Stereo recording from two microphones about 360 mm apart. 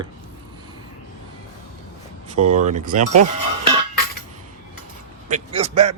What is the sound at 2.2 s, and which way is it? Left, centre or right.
Speech, centre.